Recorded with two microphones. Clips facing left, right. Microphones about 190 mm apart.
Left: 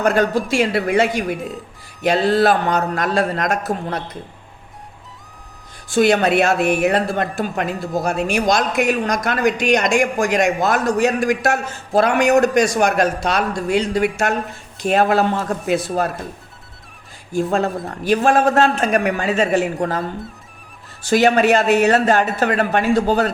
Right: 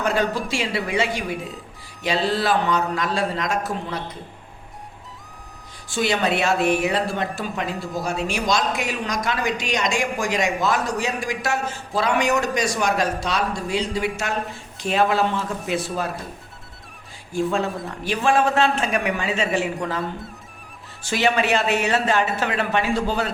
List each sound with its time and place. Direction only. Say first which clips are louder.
0.0 s a woman's voice: left 5 dB; 50° left (ahead or behind)
5.9 s a woman's voice: left 7 dB; 50° left (ahead or behind)
17.5 s a woman's voice: left 4 dB; 45° left (ahead or behind)
21.1 s a woman's voice: left 7 dB; 45° left (ahead or behind)